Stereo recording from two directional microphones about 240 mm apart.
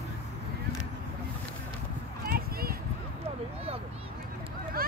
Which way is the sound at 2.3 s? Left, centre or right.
Right.